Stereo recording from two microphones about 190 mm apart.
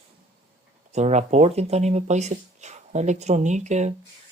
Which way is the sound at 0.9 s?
35° right (ahead or behind).